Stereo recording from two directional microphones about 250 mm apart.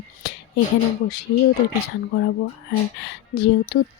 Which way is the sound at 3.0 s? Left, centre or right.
Left.